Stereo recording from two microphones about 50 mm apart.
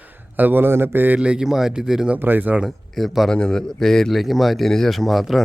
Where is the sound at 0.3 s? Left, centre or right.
Right.